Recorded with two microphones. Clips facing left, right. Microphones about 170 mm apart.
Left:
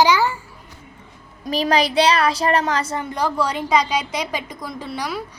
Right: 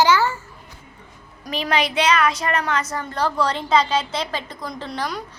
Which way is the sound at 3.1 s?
10° left (ahead or behind).